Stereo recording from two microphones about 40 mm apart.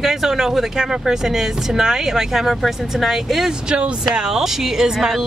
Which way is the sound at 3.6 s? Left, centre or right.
Right.